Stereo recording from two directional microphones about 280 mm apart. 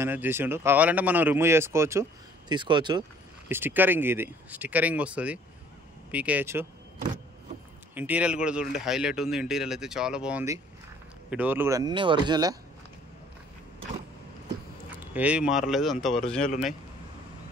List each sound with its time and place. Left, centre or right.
0.0 s speech: centre
7.9 s speech: centre
14.9 s speech: centre